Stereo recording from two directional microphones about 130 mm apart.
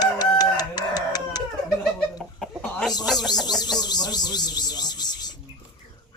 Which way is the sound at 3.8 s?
30° left (ahead or behind).